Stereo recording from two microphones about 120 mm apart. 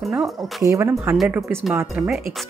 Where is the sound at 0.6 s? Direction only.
25° right (ahead or behind).